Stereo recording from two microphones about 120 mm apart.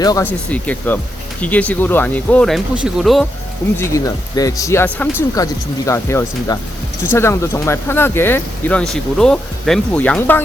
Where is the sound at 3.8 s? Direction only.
25° left (ahead or behind).